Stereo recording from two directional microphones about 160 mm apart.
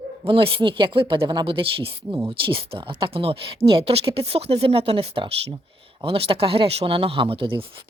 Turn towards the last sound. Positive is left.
turn(degrees=-35)  # may be behind; listen again after turning